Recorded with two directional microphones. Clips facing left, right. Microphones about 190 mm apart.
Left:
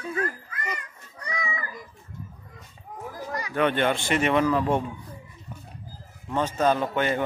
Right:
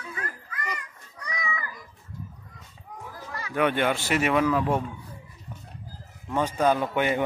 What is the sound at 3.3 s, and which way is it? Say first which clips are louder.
Speech: left 4 dB; 15° left (ahead or behind).